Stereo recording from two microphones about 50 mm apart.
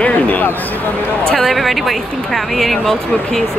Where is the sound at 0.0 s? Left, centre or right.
Left.